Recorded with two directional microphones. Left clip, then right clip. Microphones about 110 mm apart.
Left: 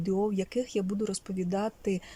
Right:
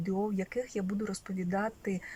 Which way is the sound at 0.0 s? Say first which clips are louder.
Left 4 dB; 15° left (ahead or behind).